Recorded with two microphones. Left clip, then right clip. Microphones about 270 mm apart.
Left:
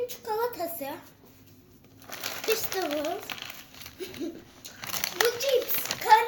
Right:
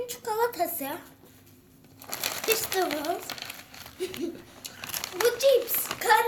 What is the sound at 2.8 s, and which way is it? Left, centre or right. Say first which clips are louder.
Speech: right 4 dB; right.